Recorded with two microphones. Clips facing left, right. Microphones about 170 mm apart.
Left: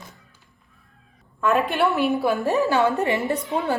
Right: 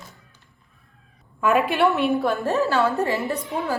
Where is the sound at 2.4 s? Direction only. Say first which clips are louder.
Left 1 dB; 15° left (ahead or behind).